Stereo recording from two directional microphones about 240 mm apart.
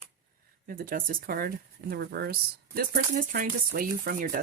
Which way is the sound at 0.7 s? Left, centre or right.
Right.